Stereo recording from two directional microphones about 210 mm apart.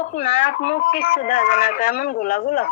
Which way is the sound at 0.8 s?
45° left (ahead or behind).